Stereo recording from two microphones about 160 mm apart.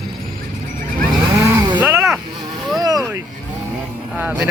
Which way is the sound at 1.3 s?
20° right (ahead or behind).